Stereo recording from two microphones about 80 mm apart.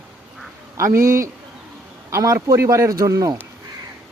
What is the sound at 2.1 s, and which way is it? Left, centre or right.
Speech, right.